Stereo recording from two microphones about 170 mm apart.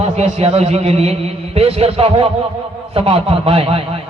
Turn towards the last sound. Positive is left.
turn(degrees=-35)  # may be behind; listen again after turning